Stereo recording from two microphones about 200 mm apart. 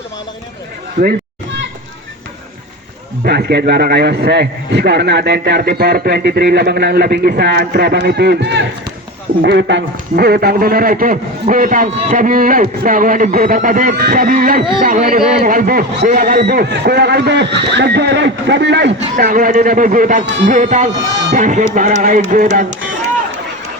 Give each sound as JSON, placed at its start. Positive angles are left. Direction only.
{"t": 1.0, "sound": "a man's voice", "side_deg": -55}
{"t": 3.2, "sound": "a man's voice", "side_deg": -55}
{"t": 20.2, "sound": "a man's voice", "side_deg": -60}
{"t": 20.5, "sound": "music", "side_deg": -40}